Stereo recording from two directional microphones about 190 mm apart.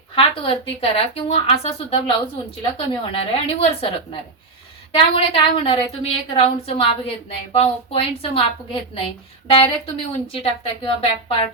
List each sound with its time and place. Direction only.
0.2 s a woman's voice: 30° left (ahead or behind)
8.2 s a woman's voice: 30° left (ahead or behind)